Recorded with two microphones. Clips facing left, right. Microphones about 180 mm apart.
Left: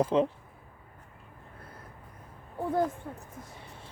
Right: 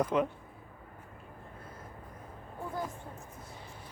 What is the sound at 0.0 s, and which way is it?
Speech, 30° left (ahead or behind).